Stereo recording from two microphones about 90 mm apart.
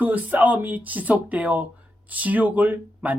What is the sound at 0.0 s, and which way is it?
Speech, 20° right (ahead or behind).